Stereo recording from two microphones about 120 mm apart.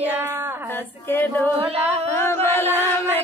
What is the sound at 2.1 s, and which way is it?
Chant, 20° left (ahead or behind).